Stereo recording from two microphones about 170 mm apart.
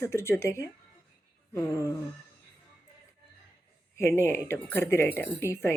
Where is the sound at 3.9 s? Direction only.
15° left (ahead or behind).